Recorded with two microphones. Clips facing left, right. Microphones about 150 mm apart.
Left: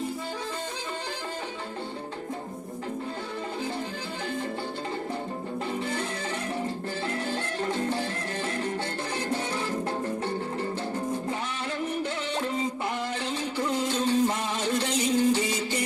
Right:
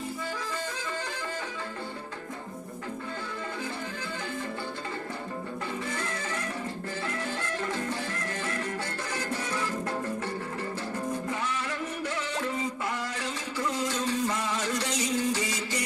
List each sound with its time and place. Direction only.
7.1 s music: 30° left (ahead or behind)
13.6 s music: 30° left (ahead or behind)